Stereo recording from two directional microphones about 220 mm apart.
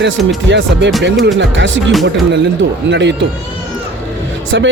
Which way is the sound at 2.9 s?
55° right (ahead or behind).